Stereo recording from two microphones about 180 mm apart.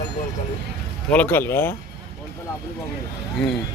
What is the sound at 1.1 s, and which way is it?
Speech, 10° left (ahead or behind).